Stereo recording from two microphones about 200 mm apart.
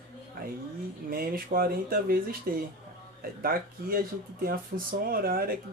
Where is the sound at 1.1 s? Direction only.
45° right (ahead or behind).